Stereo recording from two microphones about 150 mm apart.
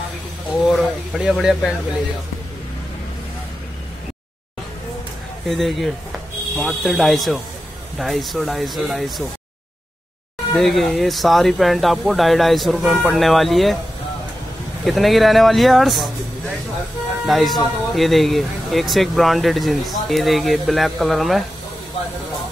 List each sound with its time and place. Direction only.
0.7 s speech: centre (ahead or behind)
5.5 s speech: centre (ahead or behind)
10.5 s speech: centre (ahead or behind)
14.9 s speech: centre (ahead or behind)
17.3 s speech: centre (ahead or behind)